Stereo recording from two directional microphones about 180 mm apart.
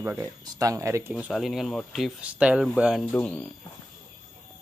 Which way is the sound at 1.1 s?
5° right (ahead or behind).